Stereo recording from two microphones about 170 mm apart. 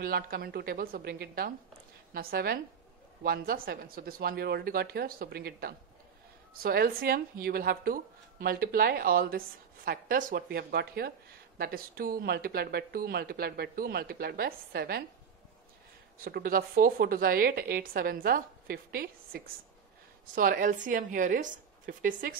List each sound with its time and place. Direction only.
0.0 s speech: 60° right (ahead or behind)
16.3 s a woman's voice: 60° right (ahead or behind)